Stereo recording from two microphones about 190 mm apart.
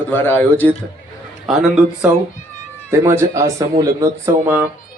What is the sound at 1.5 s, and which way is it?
Speech, centre (ahead or behind).